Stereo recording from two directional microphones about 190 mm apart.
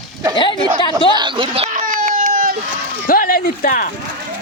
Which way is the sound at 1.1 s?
25° right (ahead or behind).